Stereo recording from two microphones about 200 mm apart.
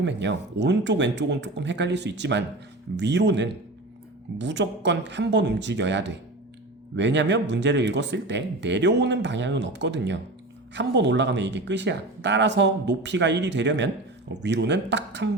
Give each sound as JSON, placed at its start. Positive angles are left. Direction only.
{"t": 0.0, "sound": "speech", "side_deg": -60}